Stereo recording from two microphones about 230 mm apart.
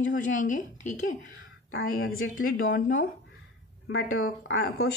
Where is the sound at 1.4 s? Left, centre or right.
Left.